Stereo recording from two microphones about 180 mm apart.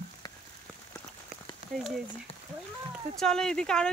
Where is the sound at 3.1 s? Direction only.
5° left (ahead or behind).